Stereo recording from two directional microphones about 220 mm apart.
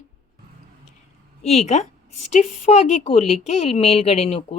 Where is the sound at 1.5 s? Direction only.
30° left (ahead or behind).